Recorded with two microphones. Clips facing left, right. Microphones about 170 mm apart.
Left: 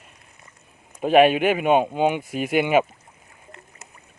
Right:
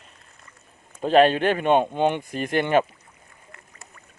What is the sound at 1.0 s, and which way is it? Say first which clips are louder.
Speech: left 1 dB; 10° left (ahead or behind).